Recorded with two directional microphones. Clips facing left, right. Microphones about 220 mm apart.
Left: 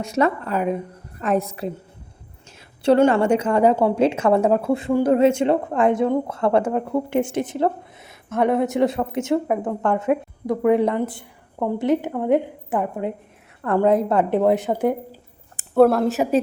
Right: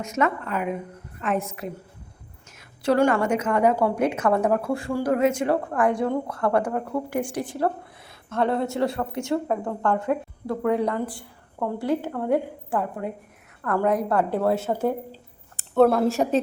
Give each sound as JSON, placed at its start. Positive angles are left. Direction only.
{"t": 0.0, "sound": "a woman's voice", "side_deg": 35}
{"t": 2.8, "sound": "a woman's voice", "side_deg": 25}
{"t": 15.7, "sound": "a woman's voice", "side_deg": 5}